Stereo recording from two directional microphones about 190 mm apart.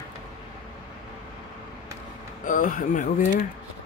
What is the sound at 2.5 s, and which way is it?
Speech, 45° left (ahead or behind).